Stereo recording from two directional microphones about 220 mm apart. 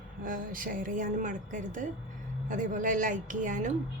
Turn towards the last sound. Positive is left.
turn(degrees=-35)  # may be behind; listen again after turning